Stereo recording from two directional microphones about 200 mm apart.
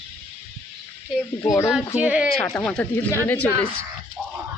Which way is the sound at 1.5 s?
15° left (ahead or behind).